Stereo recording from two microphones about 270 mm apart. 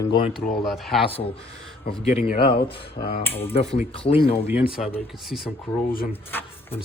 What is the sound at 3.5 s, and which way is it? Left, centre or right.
Speech, left.